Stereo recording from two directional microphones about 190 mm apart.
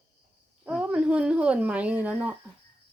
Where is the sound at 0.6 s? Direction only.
5° right (ahead or behind).